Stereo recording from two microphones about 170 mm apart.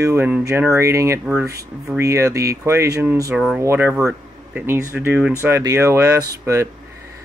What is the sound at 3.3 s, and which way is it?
Speech, 5° right (ahead or behind).